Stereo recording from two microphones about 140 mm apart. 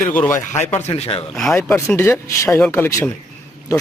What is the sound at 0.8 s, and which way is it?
Speech, 50° left (ahead or behind).